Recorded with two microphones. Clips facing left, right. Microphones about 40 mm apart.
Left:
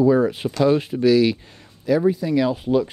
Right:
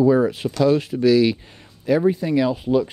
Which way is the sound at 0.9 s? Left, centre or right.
Centre.